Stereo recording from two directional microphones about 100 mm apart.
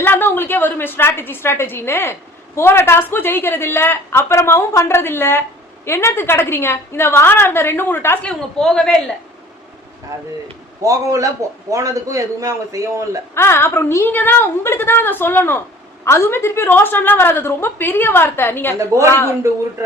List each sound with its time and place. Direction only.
0.0 s a woman's voice: 20° left (ahead or behind)
8.3 s a woman's voice: 5° left (ahead or behind)
10.8 s a man's voice: 35° right (ahead or behind)
13.3 s a woman's voice: 25° left (ahead or behind)
18.8 s a man's voice: 30° right (ahead or behind)